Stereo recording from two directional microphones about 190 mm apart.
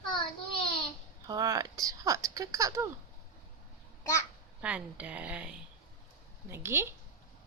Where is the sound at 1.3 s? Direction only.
20° right (ahead or behind).